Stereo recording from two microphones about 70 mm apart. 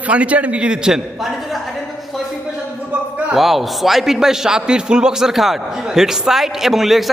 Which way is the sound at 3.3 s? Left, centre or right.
Centre.